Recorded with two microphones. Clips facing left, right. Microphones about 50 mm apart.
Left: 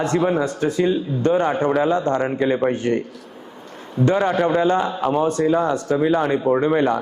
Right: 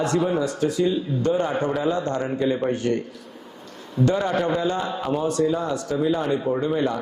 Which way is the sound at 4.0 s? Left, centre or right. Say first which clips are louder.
Left 4 dB; left.